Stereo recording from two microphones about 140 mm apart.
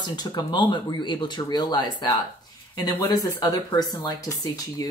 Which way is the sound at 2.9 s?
20° left (ahead or behind).